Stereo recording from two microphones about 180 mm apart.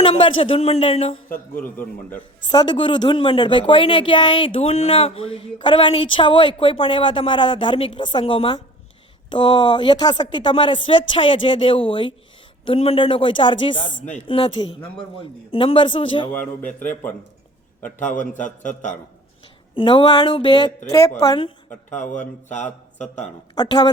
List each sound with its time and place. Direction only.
0.0 s speech: 30° left (ahead or behind)
1.3 s a man's voice: 50° left (ahead or behind)
1.7 s a man's voice: 10° left (ahead or behind)
2.5 s speech: 25° left (ahead or behind)
16.3 s a man's voice: 10° left (ahead or behind)
16.6 s a man's voice: 45° left (ahead or behind)
19.7 s speech: 25° left (ahead or behind)
22.4 s speech: 40° left (ahead or behind)
23.6 s speech: 25° left (ahead or behind)